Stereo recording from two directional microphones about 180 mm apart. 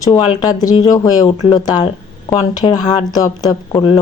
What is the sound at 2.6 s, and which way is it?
Speech, 30° left (ahead or behind).